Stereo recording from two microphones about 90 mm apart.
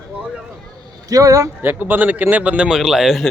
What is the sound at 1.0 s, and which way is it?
Speech, 40° right (ahead or behind).